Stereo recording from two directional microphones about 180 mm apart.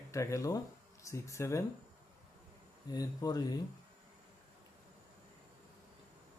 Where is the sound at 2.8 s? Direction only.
20° left (ahead or behind).